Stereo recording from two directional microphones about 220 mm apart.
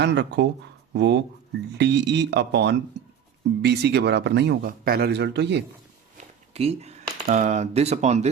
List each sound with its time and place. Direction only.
0.0 s a man's voice: 55° right (ahead or behind)
6.5 s speech: 30° right (ahead or behind)